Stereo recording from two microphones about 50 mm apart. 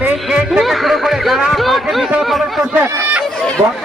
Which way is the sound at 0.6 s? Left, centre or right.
Centre.